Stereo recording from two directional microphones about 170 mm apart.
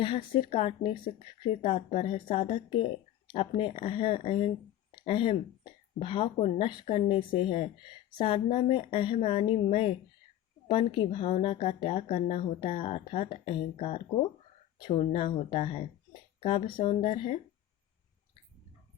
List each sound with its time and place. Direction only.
0.0 s speech: 30° left (ahead or behind)